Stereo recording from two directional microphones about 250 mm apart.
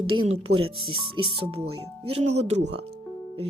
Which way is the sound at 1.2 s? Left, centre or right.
Right.